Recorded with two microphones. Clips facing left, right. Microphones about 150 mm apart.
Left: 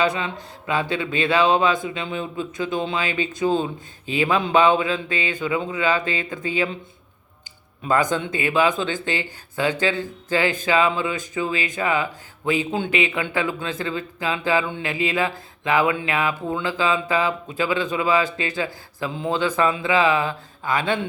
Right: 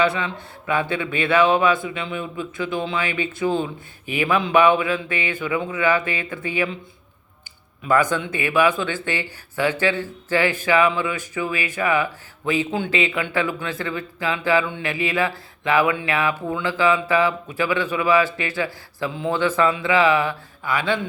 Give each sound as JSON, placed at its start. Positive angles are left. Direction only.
{"t": 0.9, "sound": "a man's voice", "side_deg": 20}
{"t": 7.9, "sound": "a man's voice", "side_deg": 20}
{"t": 20.8, "sound": "speech", "side_deg": 50}